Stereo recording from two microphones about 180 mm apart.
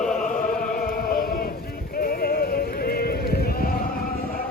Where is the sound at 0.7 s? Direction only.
55° left (ahead or behind).